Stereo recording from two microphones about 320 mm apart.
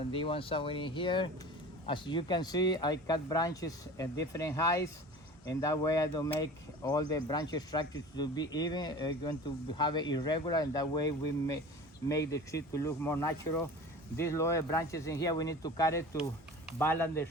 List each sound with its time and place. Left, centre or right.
0.1 s speech: centre